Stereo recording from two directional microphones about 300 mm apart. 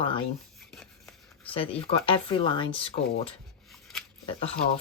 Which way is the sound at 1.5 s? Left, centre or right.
Centre.